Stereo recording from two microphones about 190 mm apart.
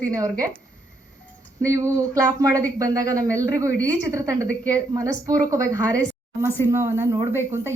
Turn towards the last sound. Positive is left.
turn(degrees=-15)  # may be behind; listen again after turning